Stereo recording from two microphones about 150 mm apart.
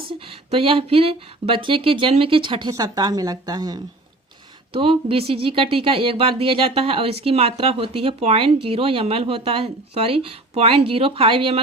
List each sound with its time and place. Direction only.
0.3 s speech: 40° right (ahead or behind)
4.7 s speech: 40° right (ahead or behind)